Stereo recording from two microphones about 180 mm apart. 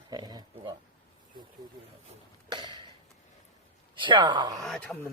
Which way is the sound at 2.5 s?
25° right (ahead or behind).